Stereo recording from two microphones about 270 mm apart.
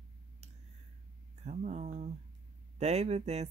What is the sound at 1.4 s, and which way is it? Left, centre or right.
Speech, right.